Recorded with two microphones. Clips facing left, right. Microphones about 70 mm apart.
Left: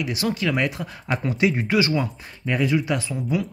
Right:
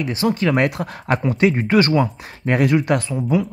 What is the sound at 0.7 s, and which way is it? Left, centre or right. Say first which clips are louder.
Speech: right 5 dB; right.